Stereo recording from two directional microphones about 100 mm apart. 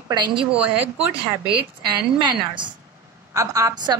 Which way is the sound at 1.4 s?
50° right (ahead or behind).